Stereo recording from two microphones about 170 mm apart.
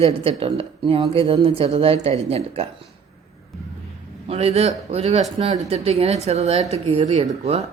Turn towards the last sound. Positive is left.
turn(degrees=-40)  # may be behind; listen again after turning